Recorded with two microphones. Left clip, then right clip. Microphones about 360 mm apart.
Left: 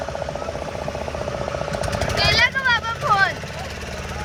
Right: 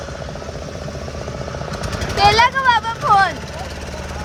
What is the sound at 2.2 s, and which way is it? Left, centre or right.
Vehicle, centre.